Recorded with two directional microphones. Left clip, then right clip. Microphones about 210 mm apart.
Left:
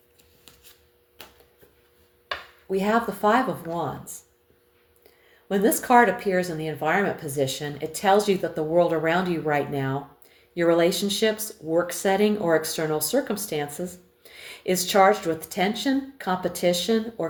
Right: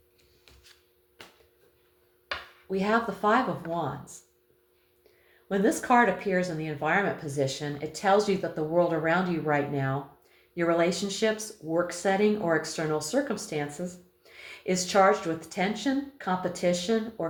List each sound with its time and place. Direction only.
2.6 s speech: 35° left (ahead or behind)
5.5 s speech: 35° left (ahead or behind)